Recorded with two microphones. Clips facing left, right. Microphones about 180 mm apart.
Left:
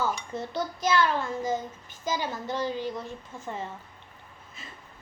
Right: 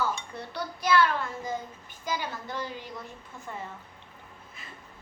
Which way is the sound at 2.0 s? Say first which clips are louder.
Left 3 dB; 25° left (ahead or behind).